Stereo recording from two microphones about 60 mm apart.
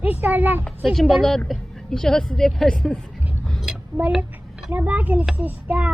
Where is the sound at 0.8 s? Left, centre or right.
Centre.